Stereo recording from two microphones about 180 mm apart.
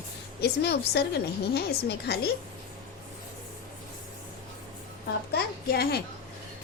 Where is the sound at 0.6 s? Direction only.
65° left (ahead or behind).